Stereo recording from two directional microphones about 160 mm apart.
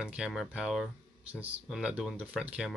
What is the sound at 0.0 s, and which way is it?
Speech, 5° right (ahead or behind).